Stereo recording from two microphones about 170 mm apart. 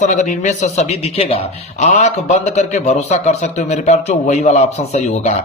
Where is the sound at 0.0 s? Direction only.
45° left (ahead or behind).